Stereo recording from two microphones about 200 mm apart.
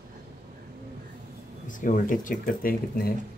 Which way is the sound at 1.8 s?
40° left (ahead or behind).